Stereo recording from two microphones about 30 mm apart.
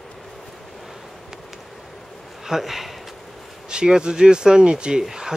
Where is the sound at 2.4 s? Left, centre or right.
Centre.